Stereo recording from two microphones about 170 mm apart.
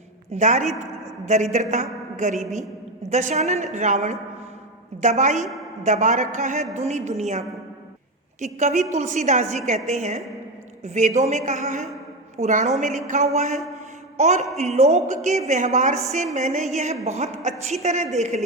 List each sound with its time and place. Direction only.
0.3 s a woman's voice: 45° right (ahead or behind)
5.4 s a woman's voice: centre (ahead or behind)
5.8 s a woman's voice: 45° right (ahead or behind)
8.4 s a woman's voice: 45° right (ahead or behind)